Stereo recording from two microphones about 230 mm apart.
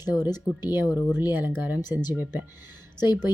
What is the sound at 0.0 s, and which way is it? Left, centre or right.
Speech, centre.